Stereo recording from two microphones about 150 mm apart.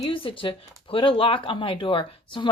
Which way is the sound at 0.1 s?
35° left (ahead or behind).